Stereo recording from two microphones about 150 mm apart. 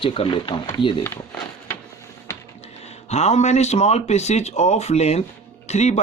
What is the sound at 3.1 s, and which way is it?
Speech, 45° left (ahead or behind).